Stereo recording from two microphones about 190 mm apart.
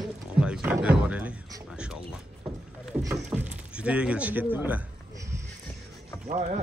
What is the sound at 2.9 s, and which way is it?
Rowboat, 5° right (ahead or behind).